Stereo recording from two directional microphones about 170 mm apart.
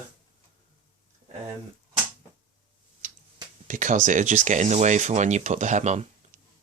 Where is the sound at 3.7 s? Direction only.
50° right (ahead or behind).